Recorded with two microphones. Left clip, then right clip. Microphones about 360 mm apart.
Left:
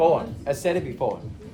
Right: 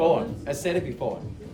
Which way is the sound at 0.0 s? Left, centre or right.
Centre.